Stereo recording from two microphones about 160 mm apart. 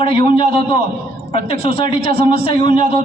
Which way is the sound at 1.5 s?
65° right (ahead or behind).